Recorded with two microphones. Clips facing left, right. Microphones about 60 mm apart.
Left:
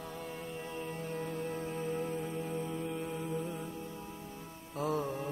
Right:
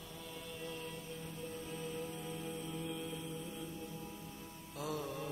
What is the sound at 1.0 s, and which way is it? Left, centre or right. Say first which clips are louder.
Music: left 9 dB; left.